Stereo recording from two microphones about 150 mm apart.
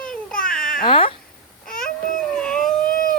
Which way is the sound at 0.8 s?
35° left (ahead or behind).